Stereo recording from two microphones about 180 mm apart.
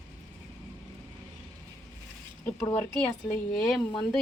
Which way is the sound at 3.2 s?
5° left (ahead or behind).